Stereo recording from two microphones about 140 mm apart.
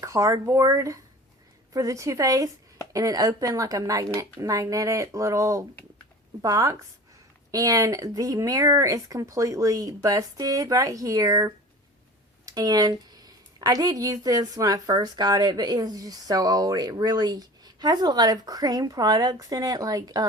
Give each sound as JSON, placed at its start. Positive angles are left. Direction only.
{"t": 0.0, "sound": "a woman's voice", "side_deg": -20}